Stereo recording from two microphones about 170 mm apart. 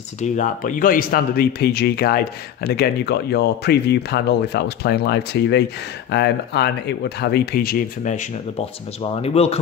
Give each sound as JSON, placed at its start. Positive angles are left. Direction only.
{"t": 0.2, "sound": "a man's voice", "side_deg": 50}